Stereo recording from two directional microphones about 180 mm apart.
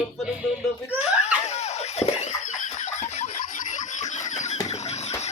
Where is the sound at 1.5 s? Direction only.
40° left (ahead or behind).